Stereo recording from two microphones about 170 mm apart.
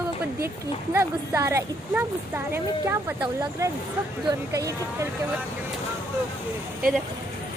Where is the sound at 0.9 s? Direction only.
15° right (ahead or behind).